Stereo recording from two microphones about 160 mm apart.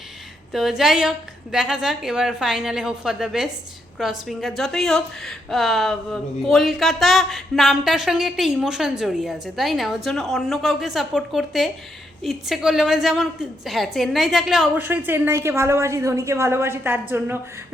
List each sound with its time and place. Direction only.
0.5 s a woman's voice: centre (ahead or behind)